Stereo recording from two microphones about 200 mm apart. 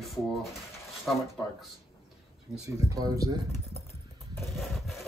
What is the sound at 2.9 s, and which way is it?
Speech, 15° right (ahead or behind).